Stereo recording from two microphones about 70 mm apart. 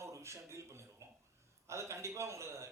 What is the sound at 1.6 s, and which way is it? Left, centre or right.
A man's voice, right.